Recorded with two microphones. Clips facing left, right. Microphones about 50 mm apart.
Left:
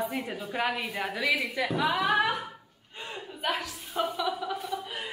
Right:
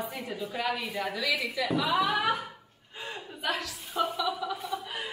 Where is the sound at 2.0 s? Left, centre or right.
Centre.